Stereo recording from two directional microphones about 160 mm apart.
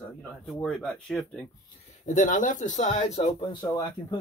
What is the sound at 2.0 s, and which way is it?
Speech, 55° left (ahead or behind).